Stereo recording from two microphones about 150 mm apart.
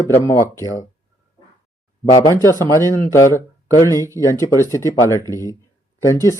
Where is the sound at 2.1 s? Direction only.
20° left (ahead or behind).